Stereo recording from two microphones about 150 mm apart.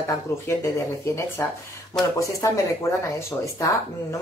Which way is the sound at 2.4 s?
20° left (ahead or behind).